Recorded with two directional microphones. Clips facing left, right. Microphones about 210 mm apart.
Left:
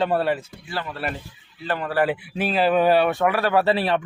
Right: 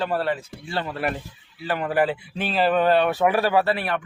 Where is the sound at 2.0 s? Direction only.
5° left (ahead or behind).